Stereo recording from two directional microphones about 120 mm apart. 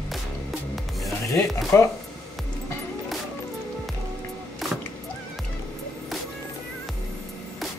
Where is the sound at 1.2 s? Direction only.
25° left (ahead or behind).